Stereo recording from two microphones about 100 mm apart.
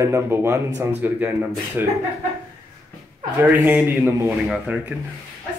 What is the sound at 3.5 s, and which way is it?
Speech, 20° right (ahead or behind).